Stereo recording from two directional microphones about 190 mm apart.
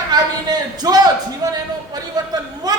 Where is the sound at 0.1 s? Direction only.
20° right (ahead or behind).